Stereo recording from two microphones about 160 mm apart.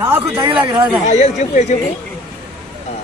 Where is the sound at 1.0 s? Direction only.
45° left (ahead or behind).